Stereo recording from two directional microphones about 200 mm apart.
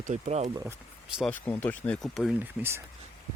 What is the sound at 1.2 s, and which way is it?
Speech, 5° left (ahead or behind).